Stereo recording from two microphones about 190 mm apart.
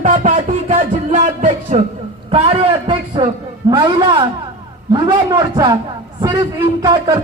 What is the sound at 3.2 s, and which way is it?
A man's voice, 25° right (ahead or behind).